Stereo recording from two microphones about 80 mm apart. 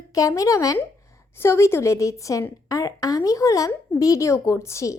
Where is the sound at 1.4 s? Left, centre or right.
Left.